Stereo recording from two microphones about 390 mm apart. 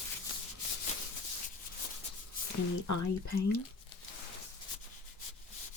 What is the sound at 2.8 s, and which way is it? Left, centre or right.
Speech, left.